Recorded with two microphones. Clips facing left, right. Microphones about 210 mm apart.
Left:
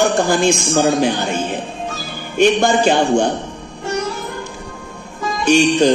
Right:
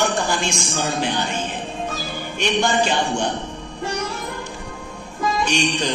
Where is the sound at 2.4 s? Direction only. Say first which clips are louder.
Left 7 dB; 45° left (ahead or behind).